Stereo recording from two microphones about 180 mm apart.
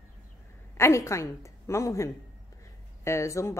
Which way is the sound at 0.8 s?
15° left (ahead or behind).